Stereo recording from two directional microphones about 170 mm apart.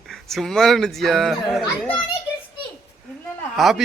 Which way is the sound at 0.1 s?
Centre (ahead or behind).